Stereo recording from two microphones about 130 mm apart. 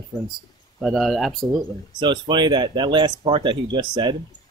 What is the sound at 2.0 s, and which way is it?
Speech, 35° right (ahead or behind).